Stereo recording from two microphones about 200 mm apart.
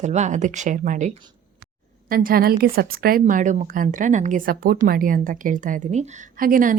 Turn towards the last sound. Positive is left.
turn(degrees=-45)  # may be behind; listen again after turning